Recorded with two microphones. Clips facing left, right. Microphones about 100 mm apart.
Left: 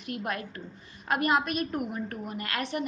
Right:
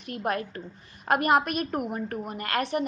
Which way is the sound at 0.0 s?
45° right (ahead or behind).